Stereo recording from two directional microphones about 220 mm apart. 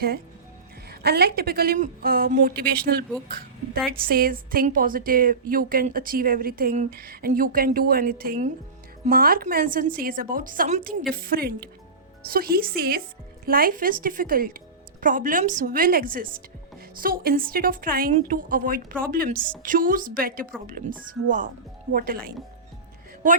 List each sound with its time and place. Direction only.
0.9 s a woman's voice: 45° right (ahead or behind)
4.0 s a woman's voice: 40° right (ahead or behind)
19.3 s a woman's voice: 5° left (ahead or behind)
19.6 s a woman's voice: 40° right (ahead or behind)